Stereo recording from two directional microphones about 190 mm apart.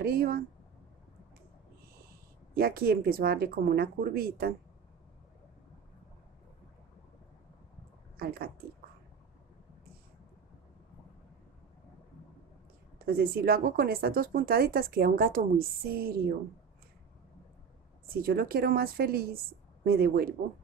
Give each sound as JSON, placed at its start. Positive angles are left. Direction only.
{"t": 0.0, "sound": "speech", "side_deg": -50}
{"t": 2.0, "sound": "speech", "side_deg": -50}
{"t": 8.2, "sound": "speech", "side_deg": -50}
{"t": 13.0, "sound": "speech", "side_deg": -50}
{"t": 18.0, "sound": "speech", "side_deg": -50}